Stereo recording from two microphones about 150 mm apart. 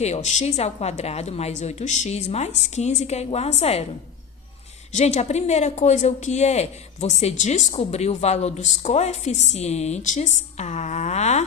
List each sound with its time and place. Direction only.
0.0 s a woman's voice: 50° left (ahead or behind)
4.9 s a woman's voice: 50° left (ahead or behind)